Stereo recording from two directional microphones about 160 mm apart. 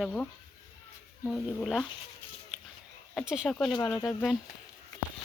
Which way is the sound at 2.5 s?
5° right (ahead or behind).